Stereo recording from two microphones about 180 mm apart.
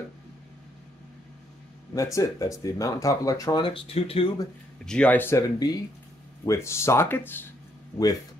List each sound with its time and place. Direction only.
2.1 s speech: 15° left (ahead or behind)
4.8 s speech: 5° left (ahead or behind)